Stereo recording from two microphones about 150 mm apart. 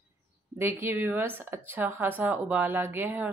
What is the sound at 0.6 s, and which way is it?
A woman's voice, 15° right (ahead or behind).